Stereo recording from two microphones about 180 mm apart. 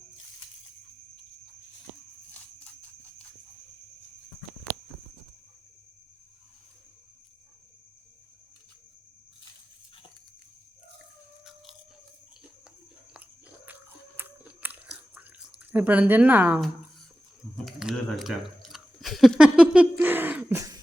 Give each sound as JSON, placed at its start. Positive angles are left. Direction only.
{"t": 14.2, "sound": "chewing", "side_deg": -10}
{"t": 17.7, "sound": "speech", "side_deg": 0}